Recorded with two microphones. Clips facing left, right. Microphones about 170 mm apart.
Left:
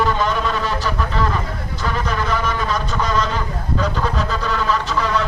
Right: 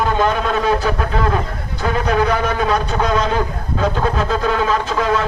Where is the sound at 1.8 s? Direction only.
60° right (ahead or behind).